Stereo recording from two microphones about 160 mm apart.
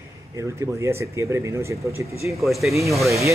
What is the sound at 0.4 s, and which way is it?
Speech, 15° right (ahead or behind).